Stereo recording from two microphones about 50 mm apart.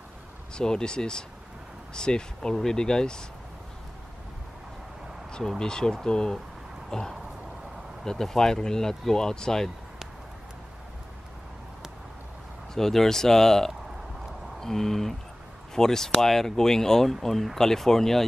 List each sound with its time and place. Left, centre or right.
0.6 s speech: centre
5.6 s speech: centre
6.9 s a sound: centre
8.0 s speech: centre
12.7 s speech: centre